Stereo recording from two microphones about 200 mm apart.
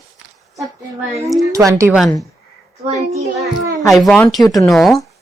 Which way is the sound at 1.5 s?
15° right (ahead or behind).